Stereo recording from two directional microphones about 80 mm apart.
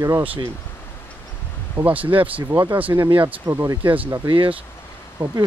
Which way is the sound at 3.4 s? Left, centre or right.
Right.